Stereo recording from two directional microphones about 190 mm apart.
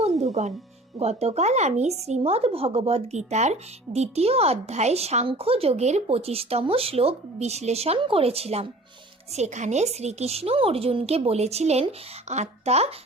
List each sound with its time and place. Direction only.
0.0 s music: 35° right (ahead or behind)
0.9 s speech: 35° right (ahead or behind)